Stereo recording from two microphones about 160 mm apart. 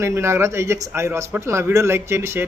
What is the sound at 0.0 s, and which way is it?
Speech, 15° right (ahead or behind).